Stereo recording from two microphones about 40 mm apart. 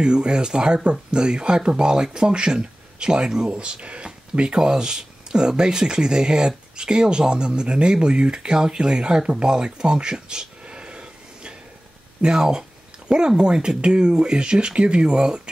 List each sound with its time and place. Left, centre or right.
0.0 s speech: right